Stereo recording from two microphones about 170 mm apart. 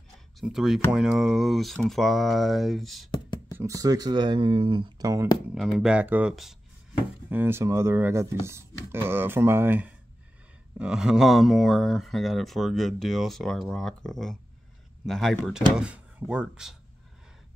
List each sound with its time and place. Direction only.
0.4 s speech: centre (ahead or behind)
3.1 s beatboxing: 25° left (ahead or behind)
3.5 s speech: 20° right (ahead or behind)
5.5 s speech: centre (ahead or behind)